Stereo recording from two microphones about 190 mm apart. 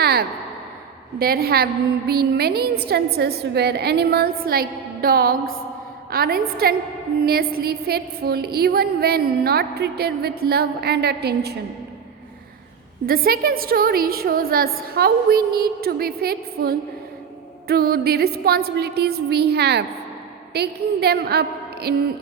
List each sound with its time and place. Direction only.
0.0 s a sound: 55° right (ahead or behind)
1.2 s a woman's voice: 55° right (ahead or behind)
13.1 s a woman's voice: 50° right (ahead or behind)